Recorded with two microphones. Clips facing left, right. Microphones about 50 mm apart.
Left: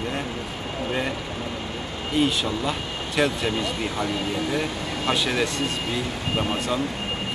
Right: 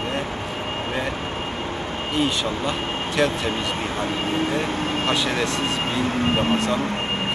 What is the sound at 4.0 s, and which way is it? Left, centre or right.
Speech, right.